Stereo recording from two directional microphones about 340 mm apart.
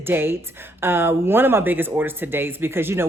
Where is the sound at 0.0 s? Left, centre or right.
Centre.